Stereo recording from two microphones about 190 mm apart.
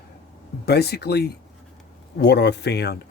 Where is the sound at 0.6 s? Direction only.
60° left (ahead or behind).